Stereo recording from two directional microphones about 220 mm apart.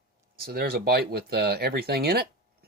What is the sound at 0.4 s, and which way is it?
Speech, 45° right (ahead or behind).